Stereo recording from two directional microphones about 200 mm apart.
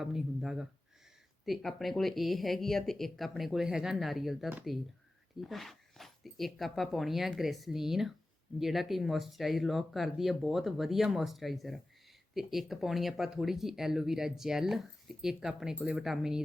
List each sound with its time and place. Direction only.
0.0 s speech: centre (ahead or behind)